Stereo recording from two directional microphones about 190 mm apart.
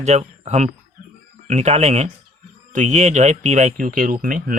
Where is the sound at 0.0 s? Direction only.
35° right (ahead or behind).